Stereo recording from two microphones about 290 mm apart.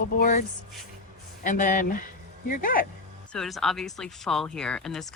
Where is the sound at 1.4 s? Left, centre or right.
Left.